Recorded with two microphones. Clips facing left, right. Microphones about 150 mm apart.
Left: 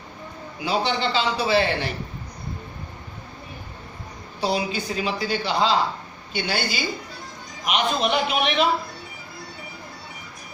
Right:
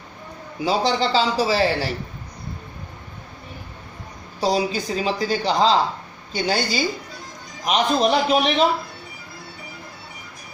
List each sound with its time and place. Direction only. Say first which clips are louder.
0.6 s speech: right 3 dB; 40° right (ahead or behind)
4.4 s speech: right 3 dB; 40° right (ahead or behind)